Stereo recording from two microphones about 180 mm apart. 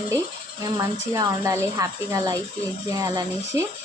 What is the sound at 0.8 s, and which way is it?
Speech, 15° right (ahead or behind).